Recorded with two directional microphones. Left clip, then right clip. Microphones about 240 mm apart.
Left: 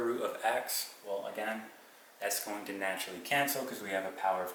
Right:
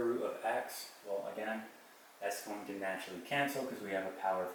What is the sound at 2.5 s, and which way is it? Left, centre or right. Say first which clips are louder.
Speech: left 4 dB; centre.